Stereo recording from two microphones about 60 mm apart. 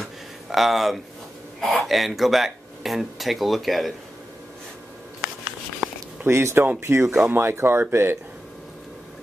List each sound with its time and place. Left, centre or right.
0.0 s a sound: centre
1.6 s speech: centre
6.2 s speech: right